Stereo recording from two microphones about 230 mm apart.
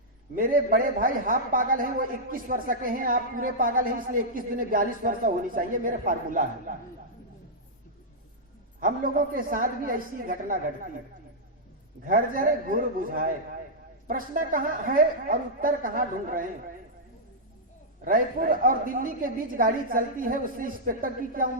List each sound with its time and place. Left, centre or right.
0.3 s a man's voice: right
8.8 s a man's voice: right
12.0 s a man's voice: right
18.0 s a man's voice: right